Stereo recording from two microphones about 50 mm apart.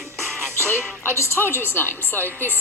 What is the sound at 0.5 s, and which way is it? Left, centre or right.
Speech, right.